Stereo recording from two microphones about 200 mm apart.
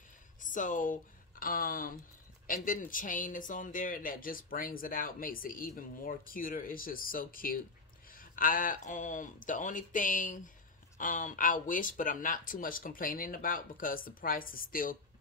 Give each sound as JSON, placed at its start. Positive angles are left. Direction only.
{"t": 0.4, "sound": "speech", "side_deg": 40}